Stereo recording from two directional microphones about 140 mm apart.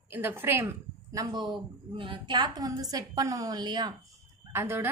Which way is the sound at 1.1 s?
30° right (ahead or behind).